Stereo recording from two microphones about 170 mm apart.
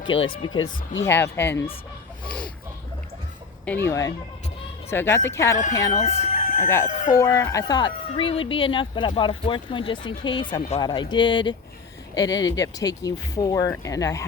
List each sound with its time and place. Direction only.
0.0 s speech: 30° left (ahead or behind)
1.0 s speech: 15° left (ahead or behind)
2.2 s a sound: 5° left (ahead or behind)
3.7 s a woman's voice: 15° left (ahead or behind)
6.2 s chicken: 45° left (ahead or behind)
6.8 s speech: 45° left (ahead or behind)
7.1 s a woman's voice: 20° left (ahead or behind)